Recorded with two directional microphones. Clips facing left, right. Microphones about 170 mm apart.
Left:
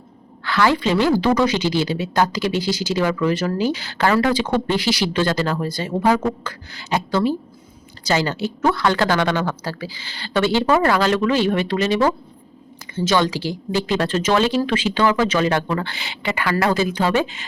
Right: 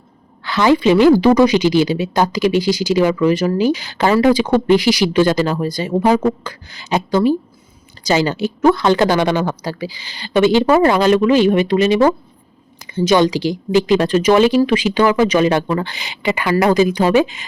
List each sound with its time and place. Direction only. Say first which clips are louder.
0.4 s a woman's voice: right 5 dB; 15° right (ahead or behind)